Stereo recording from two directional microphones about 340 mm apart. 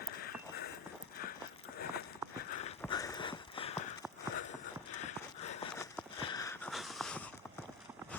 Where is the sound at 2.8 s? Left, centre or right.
Centre.